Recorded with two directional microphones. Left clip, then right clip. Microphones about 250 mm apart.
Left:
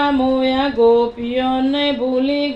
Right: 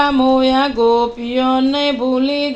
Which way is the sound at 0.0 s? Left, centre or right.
Right.